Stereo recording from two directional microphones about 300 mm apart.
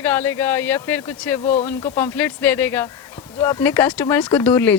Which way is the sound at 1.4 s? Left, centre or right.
Left.